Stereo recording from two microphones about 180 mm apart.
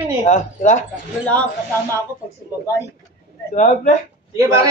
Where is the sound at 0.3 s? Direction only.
45° left (ahead or behind).